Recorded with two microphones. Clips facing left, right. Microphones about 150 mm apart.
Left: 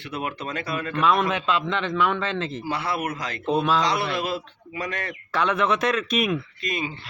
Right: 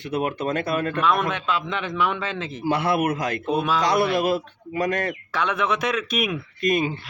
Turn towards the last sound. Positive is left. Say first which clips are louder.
# right 8 dB
turn(degrees=-50)  # may be behind; listen again after turning